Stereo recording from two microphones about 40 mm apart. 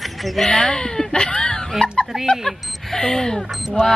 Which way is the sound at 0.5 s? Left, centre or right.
Centre.